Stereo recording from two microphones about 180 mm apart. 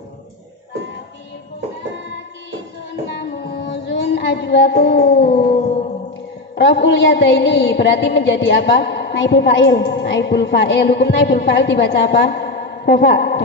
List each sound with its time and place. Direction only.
3.2 s music: 70° left (ahead or behind)
5.5 s howl: 40° left (ahead or behind)
6.5 s a man's voice: 75° left (ahead or behind)